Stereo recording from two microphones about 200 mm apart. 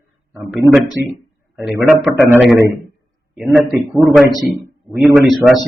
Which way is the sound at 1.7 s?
5° right (ahead or behind).